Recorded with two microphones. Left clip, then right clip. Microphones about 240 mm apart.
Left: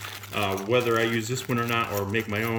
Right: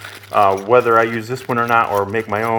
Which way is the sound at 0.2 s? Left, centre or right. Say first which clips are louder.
Right 15 dB; centre.